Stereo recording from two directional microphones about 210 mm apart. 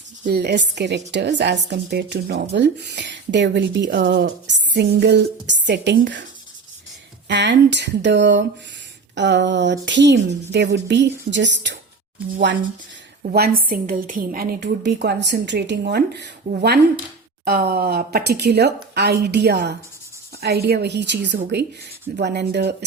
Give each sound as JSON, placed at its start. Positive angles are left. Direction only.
{"t": 0.3, "sound": "a woman's voice", "side_deg": -55}
{"t": 7.3, "sound": "a woman's voice", "side_deg": -55}
{"t": 13.2, "sound": "a woman's voice", "side_deg": -45}